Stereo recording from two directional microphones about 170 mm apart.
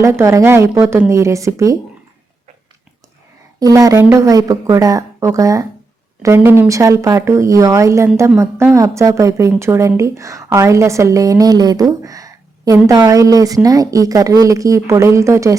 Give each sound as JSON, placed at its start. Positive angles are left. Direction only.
{"t": 0.0, "sound": "speech", "side_deg": -20}
{"t": 3.6, "sound": "a woman's voice", "side_deg": -20}